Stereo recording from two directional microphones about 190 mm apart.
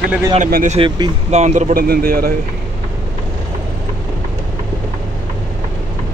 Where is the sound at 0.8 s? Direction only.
25° right (ahead or behind).